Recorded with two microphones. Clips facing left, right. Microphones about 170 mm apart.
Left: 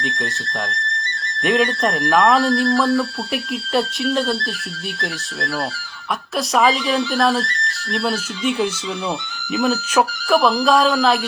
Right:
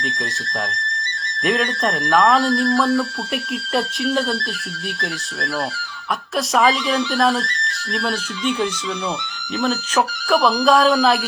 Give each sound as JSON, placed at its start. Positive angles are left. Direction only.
{"t": 1.5, "sound": "speech", "side_deg": 0}
{"t": 6.3, "sound": "speech", "side_deg": 0}
{"t": 9.6, "sound": "speech", "side_deg": 5}